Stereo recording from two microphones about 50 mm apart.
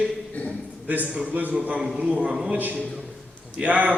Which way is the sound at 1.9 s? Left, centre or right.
Centre.